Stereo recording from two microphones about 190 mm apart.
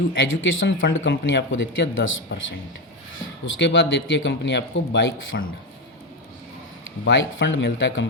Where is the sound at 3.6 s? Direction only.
70° left (ahead or behind).